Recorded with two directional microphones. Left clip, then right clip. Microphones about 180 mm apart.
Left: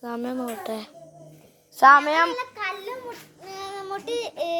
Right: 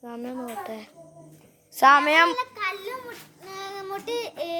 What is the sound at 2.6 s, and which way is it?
Children playing, 50° right (ahead or behind).